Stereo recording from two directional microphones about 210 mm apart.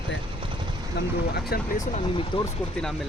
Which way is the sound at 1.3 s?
45° left (ahead or behind).